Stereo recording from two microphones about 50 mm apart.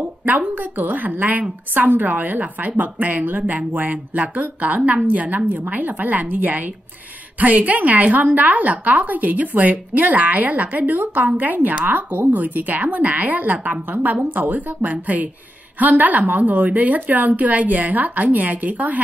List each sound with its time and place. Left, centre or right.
0.2 s a woman's voice: right